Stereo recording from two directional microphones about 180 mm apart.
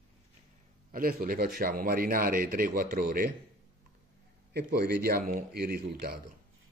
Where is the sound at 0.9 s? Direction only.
50° right (ahead or behind).